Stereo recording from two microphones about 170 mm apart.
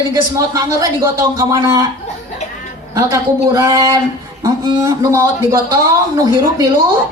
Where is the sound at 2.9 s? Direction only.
20° right (ahead or behind).